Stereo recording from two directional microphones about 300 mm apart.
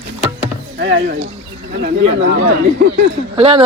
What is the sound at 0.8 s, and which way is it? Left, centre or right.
Speech, right.